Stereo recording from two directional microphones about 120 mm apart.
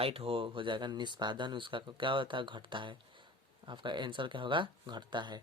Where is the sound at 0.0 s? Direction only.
50° right (ahead or behind).